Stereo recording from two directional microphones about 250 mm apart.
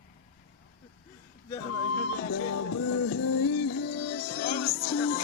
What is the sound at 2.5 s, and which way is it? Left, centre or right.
Music, left.